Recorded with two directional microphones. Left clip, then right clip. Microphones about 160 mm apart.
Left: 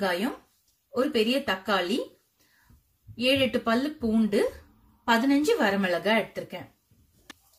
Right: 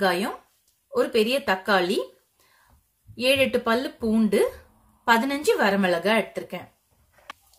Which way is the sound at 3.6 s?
65° right (ahead or behind).